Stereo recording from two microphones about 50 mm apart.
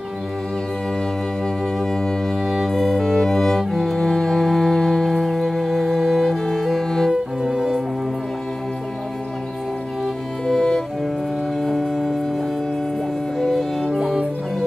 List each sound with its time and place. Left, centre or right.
1.8 s music: centre
7.1 s music: centre
10.4 s music: centre
13.8 s music: centre